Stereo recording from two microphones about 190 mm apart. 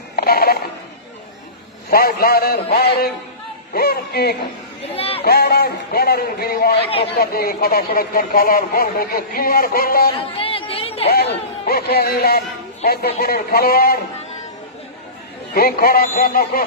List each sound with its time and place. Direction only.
0.2 s music: 55° left (ahead or behind)
1.9 s a man's voice: 55° left (ahead or behind)
4.9 s a sound: 30° left (ahead or behind)
5.2 s a man's voice: 55° left (ahead or behind)
10.3 s a sound: 30° left (ahead or behind)
11.6 s a man's voice: 55° left (ahead or behind)
15.5 s speech: 50° left (ahead or behind)